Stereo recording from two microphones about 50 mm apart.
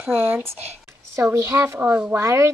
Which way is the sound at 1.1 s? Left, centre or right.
Right.